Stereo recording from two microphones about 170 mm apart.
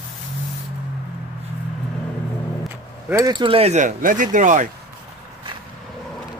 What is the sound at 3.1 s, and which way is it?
Speech, 25° right (ahead or behind).